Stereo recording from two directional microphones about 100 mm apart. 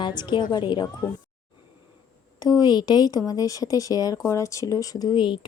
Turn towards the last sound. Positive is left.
turn(degrees=45)  # may be behind; listen again after turning